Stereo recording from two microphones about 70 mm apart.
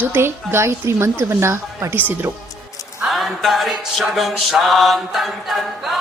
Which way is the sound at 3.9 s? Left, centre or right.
Centre.